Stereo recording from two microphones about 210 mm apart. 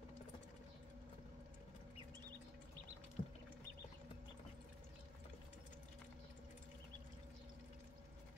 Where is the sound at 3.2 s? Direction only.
30° left (ahead or behind).